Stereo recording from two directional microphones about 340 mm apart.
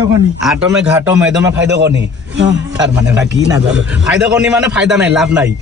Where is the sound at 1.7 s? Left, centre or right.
Right.